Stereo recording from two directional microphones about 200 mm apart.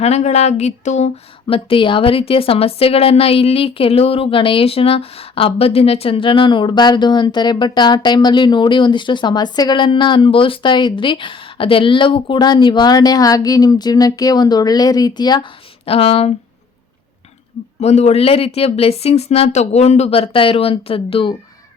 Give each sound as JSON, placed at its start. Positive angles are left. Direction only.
{"t": 0.0, "sound": "speech", "side_deg": 35}
{"t": 17.7, "sound": "speech", "side_deg": 35}